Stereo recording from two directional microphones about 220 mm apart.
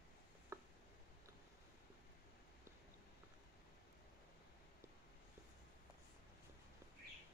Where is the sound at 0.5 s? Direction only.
10° right (ahead or behind).